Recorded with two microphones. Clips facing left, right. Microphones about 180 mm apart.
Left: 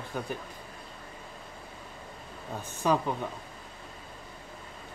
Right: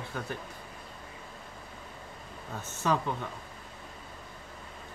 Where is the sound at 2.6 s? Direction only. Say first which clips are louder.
Left 2 dB; 15° left (ahead or behind).